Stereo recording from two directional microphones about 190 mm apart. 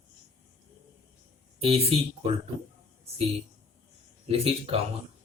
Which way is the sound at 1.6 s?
30° right (ahead or behind).